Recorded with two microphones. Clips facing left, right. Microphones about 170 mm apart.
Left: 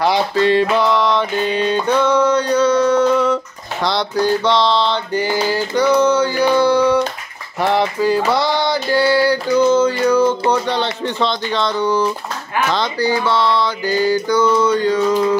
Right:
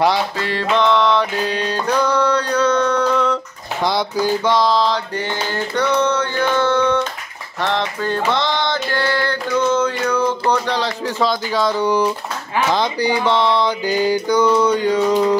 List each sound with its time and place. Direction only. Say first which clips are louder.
0.4 s mantra: left 9 dB; 20° left (ahead or behind)
0.7 s mantra: even; 5° left (ahead or behind)
3.8 s music: left 1 dB; 10° right (ahead or behind)
4.9 s mantra: left 4 dB; 5° left (ahead or behind)
7.6 s music: left 5 dB; 5° left (ahead or behind)
8.9 s a sound: left 9 dB; 10° left (ahead or behind)
9.7 s speech: left 4 dB; 10° left (ahead or behind); by 12.1 s 10° right (ahead or behind)
12.7 s music: left 1 dB; 15° right (ahead or behind)